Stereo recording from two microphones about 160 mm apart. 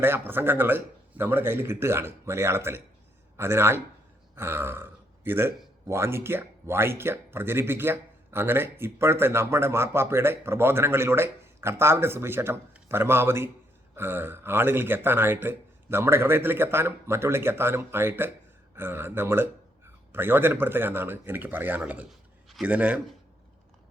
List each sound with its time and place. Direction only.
0.0 s speech: 15° right (ahead or behind)